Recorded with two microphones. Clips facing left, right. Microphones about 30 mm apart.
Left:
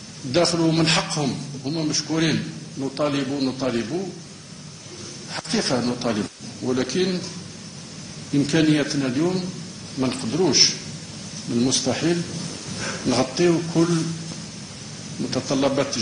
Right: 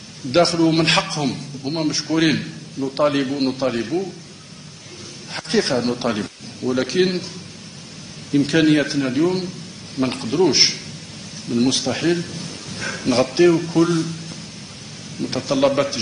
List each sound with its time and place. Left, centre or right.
0.3 s a man's voice: right
5.7 s a man's voice: centre
8.3 s a man's voice: right
15.2 s a man's voice: centre